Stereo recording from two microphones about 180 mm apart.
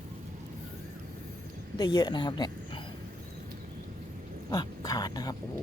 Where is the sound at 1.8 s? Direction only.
25° left (ahead or behind).